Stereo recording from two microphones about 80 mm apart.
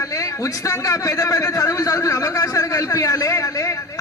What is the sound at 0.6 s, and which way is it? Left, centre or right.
A man's voice, left.